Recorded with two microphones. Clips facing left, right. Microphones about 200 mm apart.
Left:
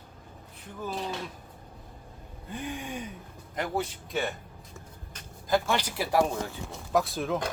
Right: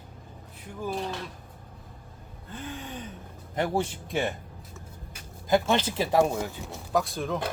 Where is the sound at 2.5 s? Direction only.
15° left (ahead or behind).